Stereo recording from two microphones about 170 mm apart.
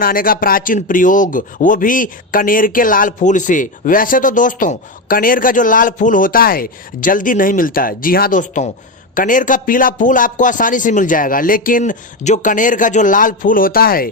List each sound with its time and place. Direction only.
0.0 s speech: 60° left (ahead or behind)